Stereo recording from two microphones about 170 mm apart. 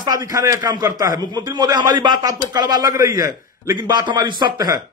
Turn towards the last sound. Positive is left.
turn(degrees=-25)  # may be behind; listen again after turning